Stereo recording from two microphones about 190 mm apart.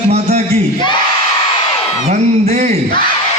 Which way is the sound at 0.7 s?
25° left (ahead or behind).